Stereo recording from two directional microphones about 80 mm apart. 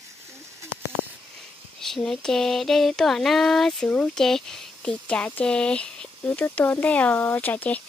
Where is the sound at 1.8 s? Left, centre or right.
Centre.